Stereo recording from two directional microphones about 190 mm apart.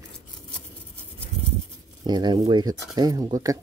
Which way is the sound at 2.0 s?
25° right (ahead or behind).